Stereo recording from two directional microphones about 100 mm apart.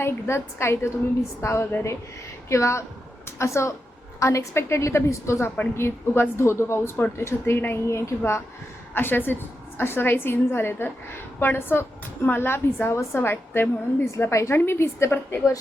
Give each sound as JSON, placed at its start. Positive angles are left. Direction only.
{"t": 0.0, "sound": "a woman's voice", "side_deg": 25}